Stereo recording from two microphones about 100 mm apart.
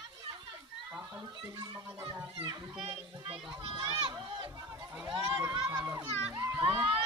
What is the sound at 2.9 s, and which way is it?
Speech, 70° right (ahead or behind).